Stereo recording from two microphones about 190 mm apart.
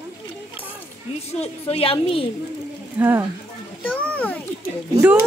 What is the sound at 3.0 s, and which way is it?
Speech, 10° right (ahead or behind).